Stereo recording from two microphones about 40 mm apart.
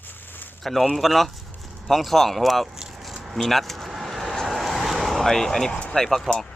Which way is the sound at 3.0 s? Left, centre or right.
Centre.